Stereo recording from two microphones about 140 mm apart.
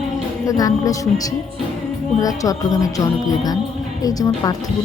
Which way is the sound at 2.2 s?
25° left (ahead or behind).